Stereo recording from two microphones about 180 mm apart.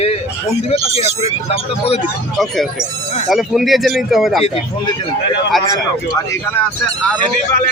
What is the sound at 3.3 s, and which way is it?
A man's voice, centre (ahead or behind).